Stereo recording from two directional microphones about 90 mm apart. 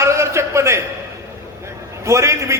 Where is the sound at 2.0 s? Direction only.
35° right (ahead or behind).